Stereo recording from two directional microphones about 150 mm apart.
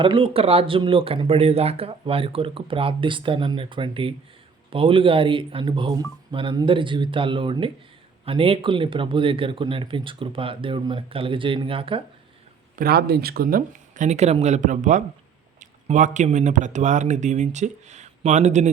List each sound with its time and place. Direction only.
0.0 s speech: 35° right (ahead or behind)
12.7 s speech: 85° right; by 18.7 s 50° right (ahead or behind)